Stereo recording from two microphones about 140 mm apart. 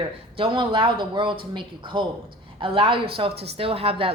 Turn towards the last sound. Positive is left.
turn(degrees=-40)  # may be behind; listen again after turning